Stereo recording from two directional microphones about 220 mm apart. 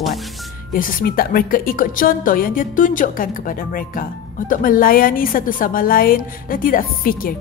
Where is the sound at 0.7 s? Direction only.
40° left (ahead or behind).